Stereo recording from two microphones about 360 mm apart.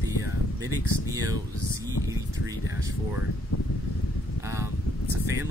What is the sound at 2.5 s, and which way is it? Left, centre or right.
Speech, centre.